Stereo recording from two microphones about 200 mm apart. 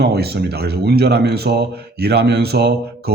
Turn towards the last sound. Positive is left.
turn(degrees=-55)  # may be behind; listen again after turning